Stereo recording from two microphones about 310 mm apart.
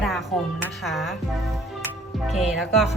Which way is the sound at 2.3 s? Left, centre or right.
Centre.